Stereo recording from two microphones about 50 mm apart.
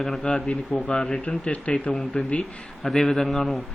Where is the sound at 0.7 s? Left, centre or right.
Left.